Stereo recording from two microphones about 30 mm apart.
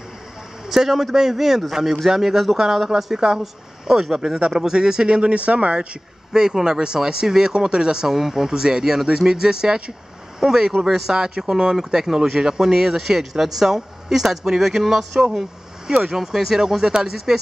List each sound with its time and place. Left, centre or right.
0.7 s speech: centre; by 5.3 s right
5.3 s speech: right
6.3 s speech: right
8.1 s speech: centre
10.4 s speech: centre